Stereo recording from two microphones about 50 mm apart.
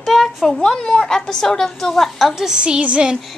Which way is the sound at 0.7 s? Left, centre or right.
Centre.